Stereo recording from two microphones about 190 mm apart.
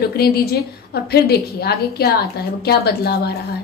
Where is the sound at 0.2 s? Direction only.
55° left (ahead or behind).